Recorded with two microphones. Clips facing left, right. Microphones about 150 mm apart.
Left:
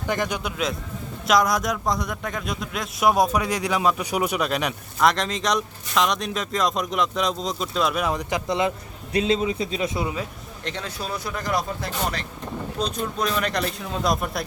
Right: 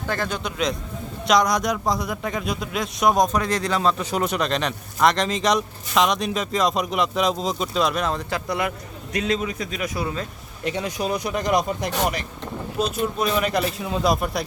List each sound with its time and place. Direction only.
0.1 s a man's voice: 15° left (ahead or behind)
10.6 s speech: 10° right (ahead or behind)
12.8 s a man's voice: 5° right (ahead or behind)